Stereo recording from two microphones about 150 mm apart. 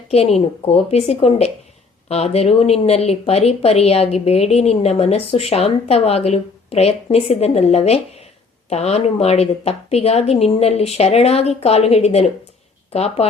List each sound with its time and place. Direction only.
0.1 s speech: 45° left (ahead or behind)